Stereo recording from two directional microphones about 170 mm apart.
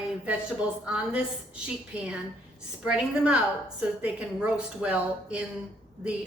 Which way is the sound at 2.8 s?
5° right (ahead or behind).